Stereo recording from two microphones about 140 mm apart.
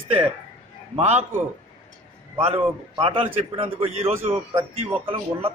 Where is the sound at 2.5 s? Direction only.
45° right (ahead or behind).